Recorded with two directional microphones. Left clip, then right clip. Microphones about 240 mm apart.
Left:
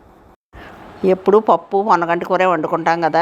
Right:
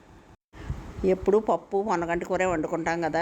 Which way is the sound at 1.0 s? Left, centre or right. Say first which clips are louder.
Left 10 dB; centre.